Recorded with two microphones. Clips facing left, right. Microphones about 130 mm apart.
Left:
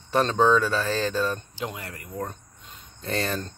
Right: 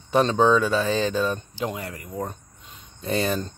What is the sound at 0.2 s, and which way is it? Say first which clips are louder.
Speech: right 2 dB; 5° right (ahead or behind).